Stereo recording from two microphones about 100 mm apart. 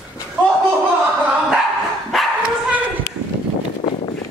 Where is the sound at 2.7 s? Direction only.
15° right (ahead or behind).